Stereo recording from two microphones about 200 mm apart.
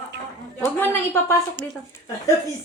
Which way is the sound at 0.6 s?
10° left (ahead or behind).